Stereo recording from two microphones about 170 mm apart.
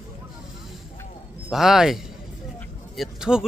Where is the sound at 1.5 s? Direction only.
Centre (ahead or behind).